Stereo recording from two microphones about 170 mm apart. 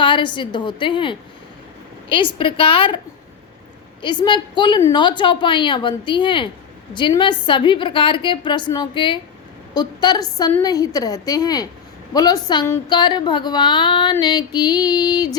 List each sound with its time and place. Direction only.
0.0 s female singing: 30° left (ahead or behind)
4.0 s female singing: 30° left (ahead or behind)